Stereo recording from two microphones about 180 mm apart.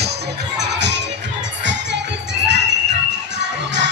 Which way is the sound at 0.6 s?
75° right (ahead or behind).